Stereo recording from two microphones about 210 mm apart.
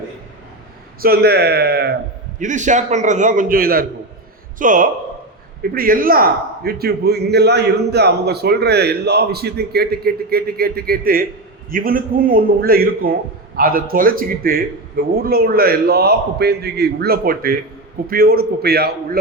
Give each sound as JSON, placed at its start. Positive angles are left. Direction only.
{"t": 1.0, "sound": "a man's voice", "side_deg": -50}
{"t": 2.4, "sound": "a man's voice", "side_deg": -35}